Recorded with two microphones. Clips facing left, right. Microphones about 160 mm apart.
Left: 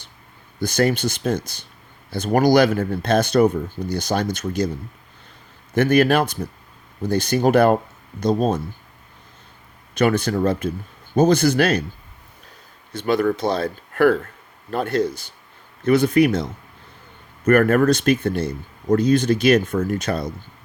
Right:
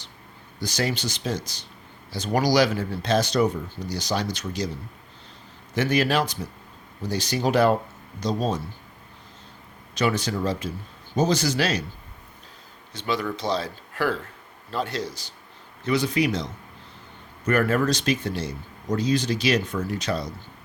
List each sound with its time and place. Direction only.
0.6 s speech: 55° left (ahead or behind)
5.7 s speech: 55° left (ahead or behind)
9.9 s speech: 55° left (ahead or behind)
12.9 s speech: 55° left (ahead or behind)